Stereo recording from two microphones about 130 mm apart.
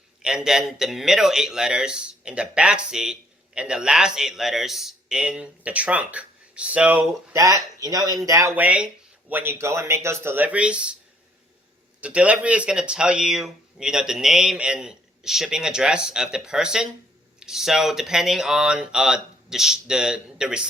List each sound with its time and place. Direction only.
0.2 s speech: 5° right (ahead or behind)
7.3 s speech: 25° right (ahead or behind); by 10.8 s 10° right (ahead or behind)
11.9 s speech: 10° right (ahead or behind)